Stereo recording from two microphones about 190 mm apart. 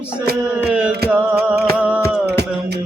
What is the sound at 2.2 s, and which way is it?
Music, 60° right (ahead or behind).